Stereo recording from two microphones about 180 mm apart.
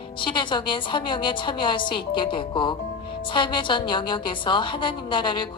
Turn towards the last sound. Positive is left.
turn(degrees=25)  # may be behind; listen again after turning